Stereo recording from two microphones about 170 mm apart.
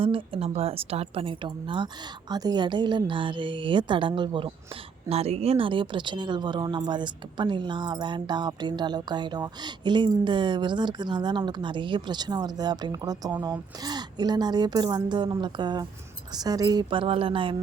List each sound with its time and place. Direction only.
0.0 s a woman's voice: 30° right (ahead or behind)